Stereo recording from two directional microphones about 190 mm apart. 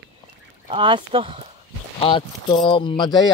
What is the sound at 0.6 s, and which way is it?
Speech, 25° right (ahead or behind).